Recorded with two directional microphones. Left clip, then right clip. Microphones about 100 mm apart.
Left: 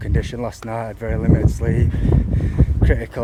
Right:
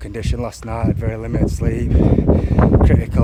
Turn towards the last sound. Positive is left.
turn(degrees=-20)  # may be behind; listen again after turning